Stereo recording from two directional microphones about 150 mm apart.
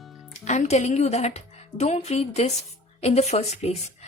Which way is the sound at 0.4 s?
50° left (ahead or behind).